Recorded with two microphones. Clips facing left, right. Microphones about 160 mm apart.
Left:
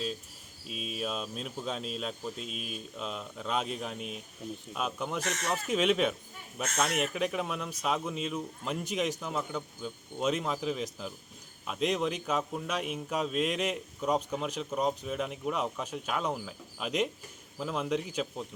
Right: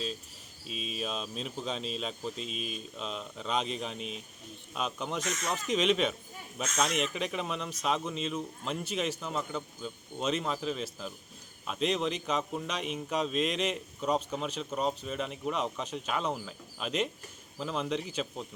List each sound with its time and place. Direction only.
0.7 s speech: 55° left (ahead or behind)
0.9 s speech: 5° left (ahead or behind)
2.3 s speech: 55° left (ahead or behind)
2.6 s speech: 5° left (ahead or behind)
3.9 s speech: 55° left (ahead or behind)
4.7 s speech: 5° left (ahead or behind)
5.2 s speech: 65° left (ahead or behind)
5.7 s speech: 5° left (ahead or behind)